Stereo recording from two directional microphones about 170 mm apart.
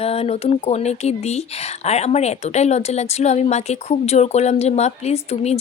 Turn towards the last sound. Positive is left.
turn(degrees=40)  # may be behind; listen again after turning